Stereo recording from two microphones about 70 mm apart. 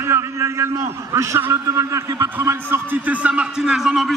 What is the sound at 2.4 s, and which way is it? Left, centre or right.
Speech, right.